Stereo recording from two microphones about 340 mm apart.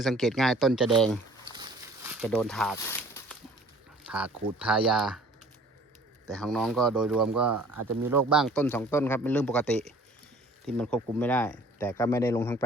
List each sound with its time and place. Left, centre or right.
0.0 s speech: centre
1.5 s a sound: centre
2.2 s speech: centre
4.0 s a sound: centre
4.5 s speech: centre
6.3 s speech: centre
7.4 s speech: right
8.3 s speech: centre